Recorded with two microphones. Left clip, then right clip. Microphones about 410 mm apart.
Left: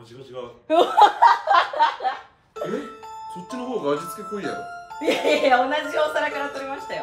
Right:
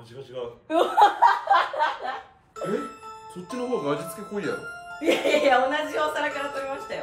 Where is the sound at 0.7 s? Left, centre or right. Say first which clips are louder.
Left 4 dB; centre.